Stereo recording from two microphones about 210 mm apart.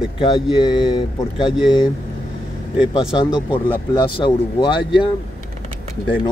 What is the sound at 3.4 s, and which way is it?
Speech, 20° left (ahead or behind).